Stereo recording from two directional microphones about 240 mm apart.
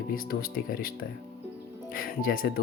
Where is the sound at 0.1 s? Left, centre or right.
Left.